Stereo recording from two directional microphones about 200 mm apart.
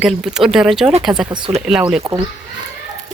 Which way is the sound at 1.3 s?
25° right (ahead or behind).